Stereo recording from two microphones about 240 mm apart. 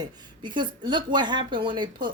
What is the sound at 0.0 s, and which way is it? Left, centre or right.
Speech, centre.